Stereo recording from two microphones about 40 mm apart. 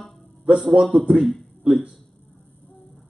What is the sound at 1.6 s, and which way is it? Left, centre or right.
Speech, right.